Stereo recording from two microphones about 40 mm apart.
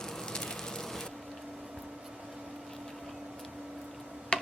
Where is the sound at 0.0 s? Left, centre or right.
Centre.